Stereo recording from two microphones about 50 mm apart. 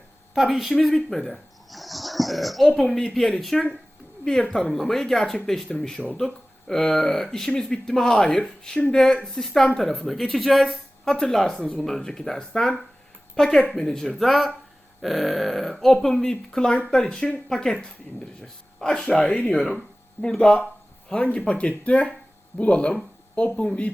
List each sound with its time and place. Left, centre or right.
0.3 s speech: centre
1.1 s wheeze: centre
2.7 s a woman's voice: centre; by 23.9 s left